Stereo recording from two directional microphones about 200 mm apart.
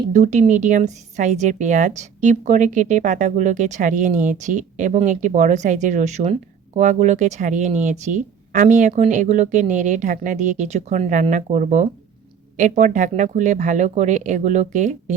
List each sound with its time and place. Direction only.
0.1 s speech: 35° right (ahead or behind)